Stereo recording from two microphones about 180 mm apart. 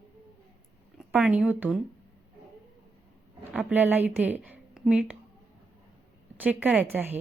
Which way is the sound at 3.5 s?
5° right (ahead or behind).